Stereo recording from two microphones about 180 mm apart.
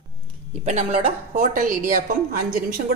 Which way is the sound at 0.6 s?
40° right (ahead or behind).